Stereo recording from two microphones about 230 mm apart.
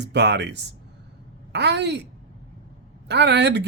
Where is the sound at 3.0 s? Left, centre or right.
Right.